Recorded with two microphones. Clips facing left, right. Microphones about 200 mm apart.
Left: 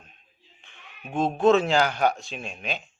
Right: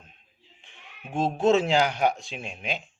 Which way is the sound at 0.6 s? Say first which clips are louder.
Left 2 dB; 25° right (ahead or behind).